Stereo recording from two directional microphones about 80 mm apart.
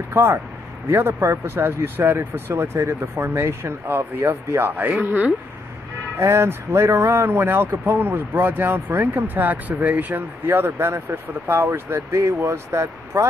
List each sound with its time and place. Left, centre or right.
0.1 s speech: right
6.1 s speech: right